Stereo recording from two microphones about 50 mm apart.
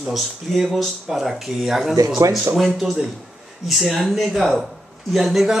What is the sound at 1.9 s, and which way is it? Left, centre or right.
Speech, right.